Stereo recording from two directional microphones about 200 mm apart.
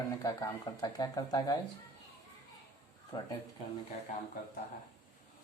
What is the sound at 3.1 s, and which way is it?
Speech, 20° left (ahead or behind).